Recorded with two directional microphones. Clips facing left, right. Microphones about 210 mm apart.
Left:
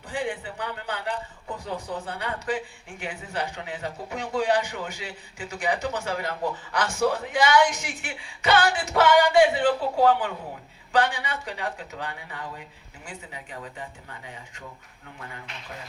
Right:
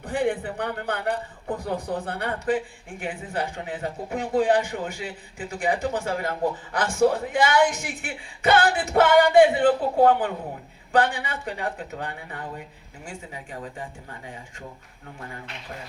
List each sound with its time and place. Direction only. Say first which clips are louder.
0.0 s a man's voice: right 6 dB; 60° right (ahead or behind)
3.1 s speech: right 5 dB; 35° right (ahead or behind)
3.5 s speech: right 3 dB; 50° right (ahead or behind)
11.6 s speech: right 2 dB; 35° right (ahead or behind)
11.9 s speech: right 2 dB; 50° right (ahead or behind)